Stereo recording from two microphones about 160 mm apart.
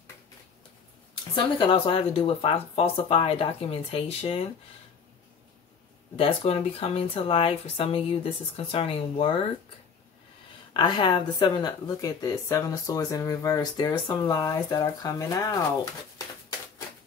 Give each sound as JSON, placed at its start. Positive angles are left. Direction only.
{"t": 1.3, "sound": "speech", "side_deg": 30}
{"t": 6.1, "sound": "speech", "side_deg": 35}
{"t": 10.7, "sound": "speech", "side_deg": 30}